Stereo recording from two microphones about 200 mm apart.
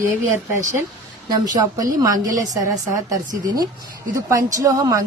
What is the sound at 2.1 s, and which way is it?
Speech, 40° right (ahead or behind).